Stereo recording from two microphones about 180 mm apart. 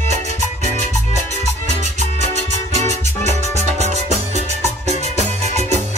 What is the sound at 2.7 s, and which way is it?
Music, 40° right (ahead or behind).